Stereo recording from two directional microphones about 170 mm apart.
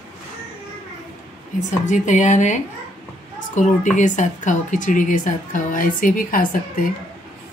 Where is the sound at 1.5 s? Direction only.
45° left (ahead or behind).